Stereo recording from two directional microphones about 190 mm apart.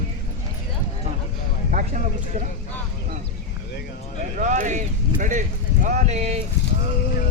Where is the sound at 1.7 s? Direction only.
40° right (ahead or behind).